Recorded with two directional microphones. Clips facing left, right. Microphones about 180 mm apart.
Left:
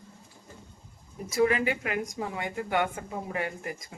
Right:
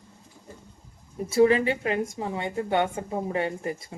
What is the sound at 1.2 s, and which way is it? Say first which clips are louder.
Speech: right 5 dB; 30° right (ahead or behind).